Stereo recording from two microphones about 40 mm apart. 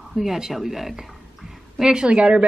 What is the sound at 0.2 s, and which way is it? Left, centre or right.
Speech, centre.